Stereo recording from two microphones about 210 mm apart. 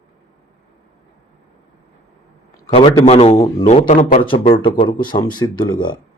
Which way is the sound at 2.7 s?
30° left (ahead or behind).